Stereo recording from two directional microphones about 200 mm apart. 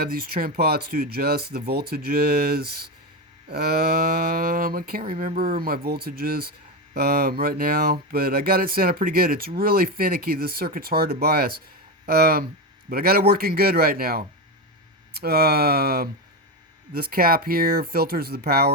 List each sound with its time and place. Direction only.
0.0 s speech: 50° right (ahead or behind)